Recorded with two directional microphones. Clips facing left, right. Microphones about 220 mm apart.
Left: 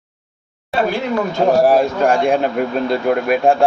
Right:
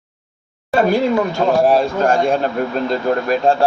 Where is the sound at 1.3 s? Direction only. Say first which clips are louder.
Left 4 dB; 15° left (ahead or behind).